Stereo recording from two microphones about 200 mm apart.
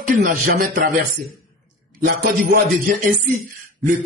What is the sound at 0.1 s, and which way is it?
Speech, 45° right (ahead or behind).